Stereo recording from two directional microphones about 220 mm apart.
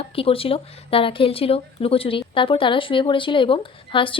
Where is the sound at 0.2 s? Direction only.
25° left (ahead or behind).